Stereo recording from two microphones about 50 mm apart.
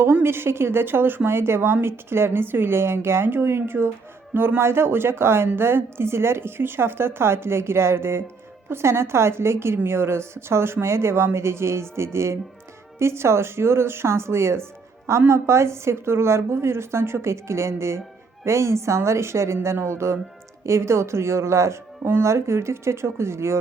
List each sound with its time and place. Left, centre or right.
0.0 s a woman's voice: right